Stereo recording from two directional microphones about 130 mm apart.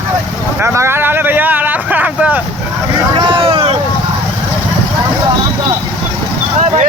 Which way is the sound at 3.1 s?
40° right (ahead or behind).